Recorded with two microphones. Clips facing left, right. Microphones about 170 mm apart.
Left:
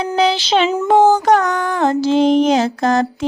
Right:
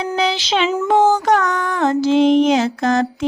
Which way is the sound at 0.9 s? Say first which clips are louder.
Left 3 dB; 35° left (ahead or behind).